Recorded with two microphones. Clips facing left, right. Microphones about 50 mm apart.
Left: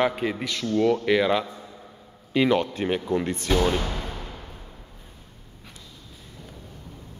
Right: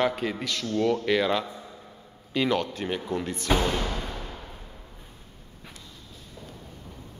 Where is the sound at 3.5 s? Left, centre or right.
Right.